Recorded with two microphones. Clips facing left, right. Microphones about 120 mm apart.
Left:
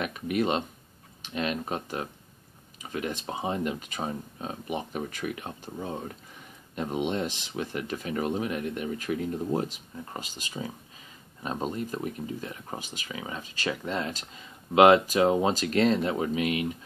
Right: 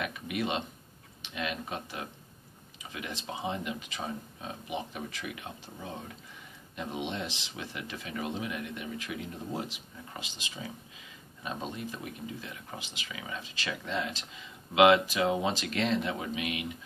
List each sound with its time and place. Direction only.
0.0 s speech: 45° left (ahead or behind)
6.8 s speech: 45° left (ahead or behind)